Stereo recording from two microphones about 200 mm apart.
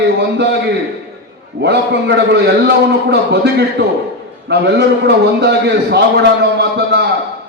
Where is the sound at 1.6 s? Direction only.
55° right (ahead or behind).